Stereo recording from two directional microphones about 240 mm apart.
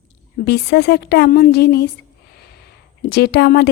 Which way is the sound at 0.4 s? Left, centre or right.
Left.